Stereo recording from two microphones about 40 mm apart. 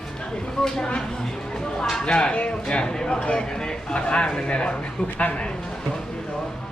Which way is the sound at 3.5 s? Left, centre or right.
Centre.